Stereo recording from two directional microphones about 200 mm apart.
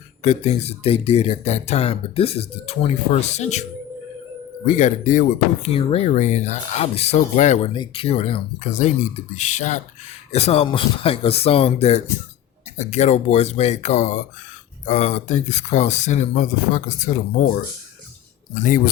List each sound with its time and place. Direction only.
0.2 s speech: 35° left (ahead or behind)
7.7 s speech: 25° left (ahead or behind)